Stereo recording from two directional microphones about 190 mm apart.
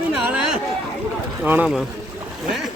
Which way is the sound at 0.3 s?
5° right (ahead or behind).